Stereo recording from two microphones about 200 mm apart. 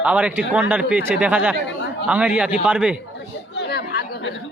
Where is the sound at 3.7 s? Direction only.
55° left (ahead or behind).